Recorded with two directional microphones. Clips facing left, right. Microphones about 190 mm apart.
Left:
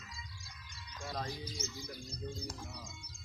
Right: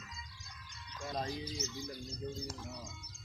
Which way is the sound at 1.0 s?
20° right (ahead or behind).